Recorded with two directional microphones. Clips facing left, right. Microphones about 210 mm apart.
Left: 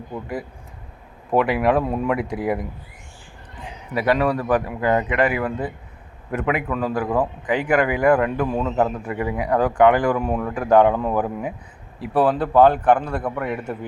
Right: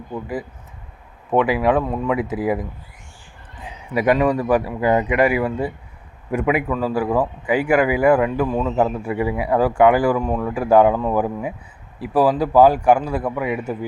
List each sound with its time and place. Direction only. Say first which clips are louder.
1.3 s speech: right 1 dB; centre (ahead or behind)
3.6 s a man's voice: right 3 dB; 15° right (ahead or behind)
10.2 s speech: right 1 dB; 5° left (ahead or behind)
10.5 s a man's voice: right 1 dB; 10° right (ahead or behind)